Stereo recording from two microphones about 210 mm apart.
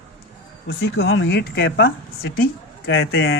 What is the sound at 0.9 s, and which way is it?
Speech, 70° left (ahead or behind).